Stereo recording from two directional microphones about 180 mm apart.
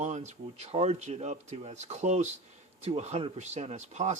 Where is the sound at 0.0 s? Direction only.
40° right (ahead or behind).